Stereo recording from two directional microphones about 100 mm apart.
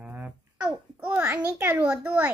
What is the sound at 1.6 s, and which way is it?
Speech, 15° right (ahead or behind).